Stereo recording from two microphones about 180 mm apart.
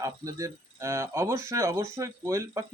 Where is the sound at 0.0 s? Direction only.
15° right (ahead or behind).